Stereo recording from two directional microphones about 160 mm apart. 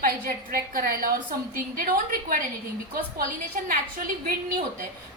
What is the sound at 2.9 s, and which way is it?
A woman's voice, 65° right (ahead or behind).